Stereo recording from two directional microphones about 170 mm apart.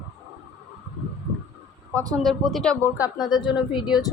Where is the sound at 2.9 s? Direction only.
20° left (ahead or behind).